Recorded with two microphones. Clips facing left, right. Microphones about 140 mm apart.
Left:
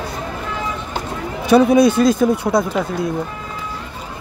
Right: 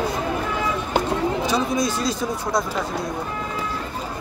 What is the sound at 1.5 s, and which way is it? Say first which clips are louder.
A man's voice: left 11 dB; 60° left (ahead or behind).